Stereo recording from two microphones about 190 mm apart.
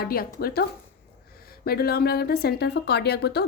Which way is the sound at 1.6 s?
55° left (ahead or behind).